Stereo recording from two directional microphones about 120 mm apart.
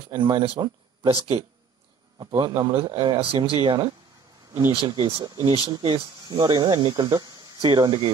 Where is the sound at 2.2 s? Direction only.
30° right (ahead or behind).